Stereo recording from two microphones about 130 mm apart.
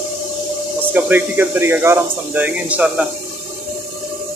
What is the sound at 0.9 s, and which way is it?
Speech, 15° right (ahead or behind).